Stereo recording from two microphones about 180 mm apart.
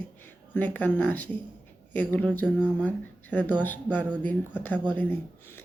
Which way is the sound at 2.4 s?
5° right (ahead or behind).